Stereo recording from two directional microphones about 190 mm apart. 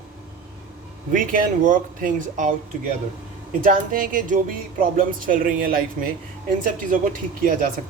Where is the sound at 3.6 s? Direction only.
45° right (ahead or behind).